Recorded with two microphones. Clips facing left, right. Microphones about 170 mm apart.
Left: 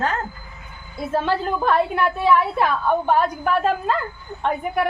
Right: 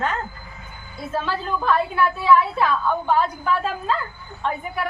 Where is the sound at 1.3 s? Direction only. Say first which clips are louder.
Left 1 dB; 60° left (ahead or behind).